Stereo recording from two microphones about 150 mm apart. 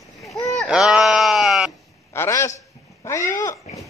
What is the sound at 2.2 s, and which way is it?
Speech, 20° left (ahead or behind).